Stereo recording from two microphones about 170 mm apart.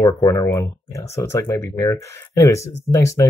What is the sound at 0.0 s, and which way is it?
Speech, 20° left (ahead or behind).